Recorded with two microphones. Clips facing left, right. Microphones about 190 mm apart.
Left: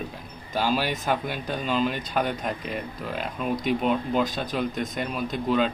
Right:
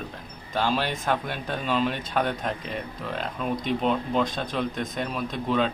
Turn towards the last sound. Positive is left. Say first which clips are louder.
# left 1 dB
turn(degrees=0)  # may be behind; listen again after turning